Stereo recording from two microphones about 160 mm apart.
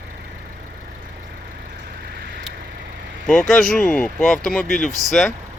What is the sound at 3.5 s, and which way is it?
Speech, 5° left (ahead or behind).